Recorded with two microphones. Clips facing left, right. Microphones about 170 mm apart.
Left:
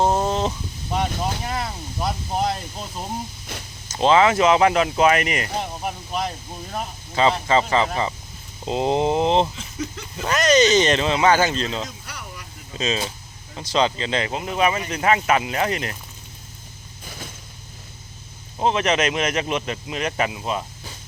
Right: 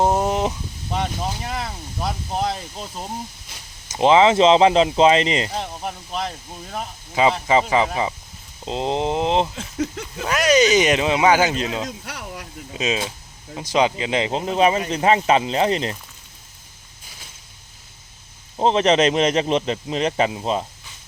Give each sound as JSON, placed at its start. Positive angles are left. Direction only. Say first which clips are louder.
{"t": 0.0, "sound": "a sound", "louder": "right 1 dB", "side_deg": -15}
{"t": 1.5, "sound": "speech", "louder": "left 1 dB", "side_deg": 0}
{"t": 3.9, "sound": "speech", "louder": "right 2 dB", "side_deg": -20}
{"t": 5.5, "sound": "speech", "louder": "left 1 dB", "side_deg": 5}
{"t": 7.1, "sound": "speech", "louder": "right 1 dB", "side_deg": -10}
{"t": 8.6, "sound": "speech", "louder": "left 2 dB", "side_deg": 5}
{"t": 11.9, "sound": "a sound", "louder": "right 5 dB", "side_deg": -90}
{"t": 12.7, "sound": "speech", "louder": "right 1 dB", "side_deg": -10}
{"t": 18.6, "sound": "speech", "louder": "right 4 dB", "side_deg": -30}